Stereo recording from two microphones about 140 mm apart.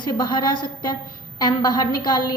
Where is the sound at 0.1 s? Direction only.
30° left (ahead or behind).